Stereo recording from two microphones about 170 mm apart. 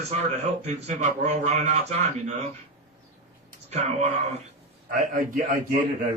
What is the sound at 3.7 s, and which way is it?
Speech, 40° right (ahead or behind).